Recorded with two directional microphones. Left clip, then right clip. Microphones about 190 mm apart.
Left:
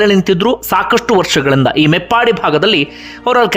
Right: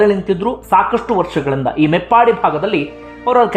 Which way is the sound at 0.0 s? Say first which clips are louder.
Left 3 dB; 35° left (ahead or behind).